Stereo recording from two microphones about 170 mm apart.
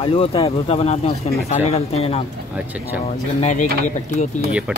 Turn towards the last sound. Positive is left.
turn(degrees=45)  # may be behind; listen again after turning